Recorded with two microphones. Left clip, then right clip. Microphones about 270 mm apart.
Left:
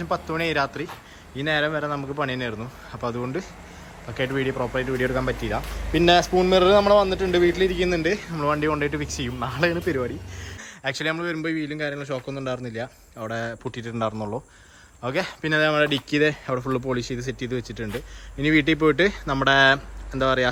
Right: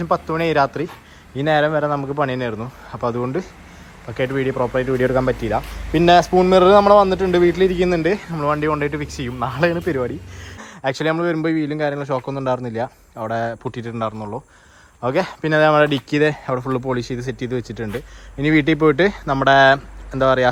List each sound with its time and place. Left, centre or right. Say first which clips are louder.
0.0 s speech: right 6 dB; centre